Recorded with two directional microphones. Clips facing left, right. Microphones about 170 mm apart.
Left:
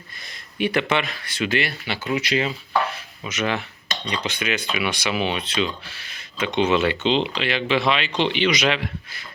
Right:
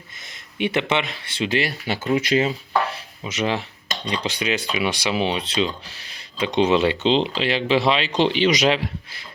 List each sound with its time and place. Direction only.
0.6 s speech: 20° right (ahead or behind); by 2.5 s 40° right (ahead or behind)
2.8 s dishes: 35° right (ahead or behind)
4.0 s speech: 35° right (ahead or behind)